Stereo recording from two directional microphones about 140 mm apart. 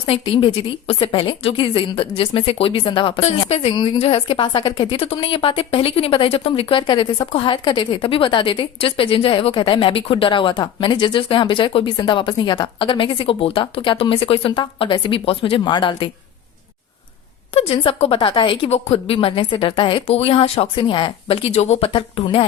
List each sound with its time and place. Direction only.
0.0 s a woman's voice: 40° left (ahead or behind)
17.5 s a woman's voice: 45° left (ahead or behind)